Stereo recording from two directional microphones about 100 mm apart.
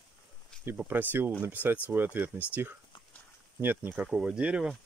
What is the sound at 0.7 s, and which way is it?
Speech, 20° right (ahead or behind).